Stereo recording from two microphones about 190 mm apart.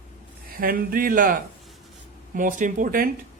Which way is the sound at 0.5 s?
50° right (ahead or behind).